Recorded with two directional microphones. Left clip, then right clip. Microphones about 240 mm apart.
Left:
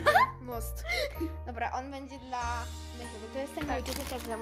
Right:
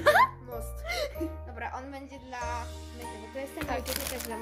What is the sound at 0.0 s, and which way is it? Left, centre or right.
Music, centre.